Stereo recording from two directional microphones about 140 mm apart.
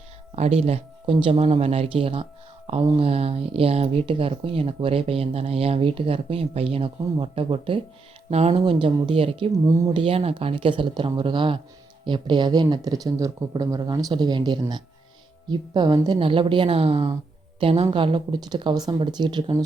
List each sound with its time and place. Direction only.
0.3 s speech: 50° right (ahead or behind); by 19.6 s 35° right (ahead or behind)